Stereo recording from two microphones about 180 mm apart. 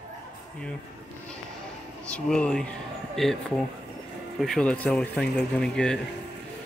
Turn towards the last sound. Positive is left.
turn(degrees=5)  # may be behind; listen again after turning